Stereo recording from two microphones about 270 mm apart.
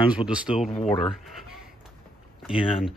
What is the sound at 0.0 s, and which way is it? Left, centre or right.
Speech, centre.